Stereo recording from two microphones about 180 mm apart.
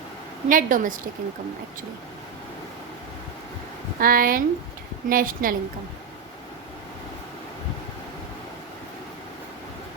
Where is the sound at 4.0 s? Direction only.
50° right (ahead or behind).